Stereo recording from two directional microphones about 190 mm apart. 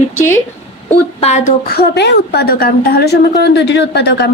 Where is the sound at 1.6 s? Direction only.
55° left (ahead or behind).